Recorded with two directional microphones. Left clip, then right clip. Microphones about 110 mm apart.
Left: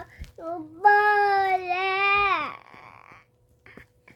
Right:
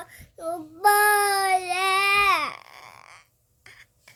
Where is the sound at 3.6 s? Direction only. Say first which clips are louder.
Even; 20° right (ahead or behind).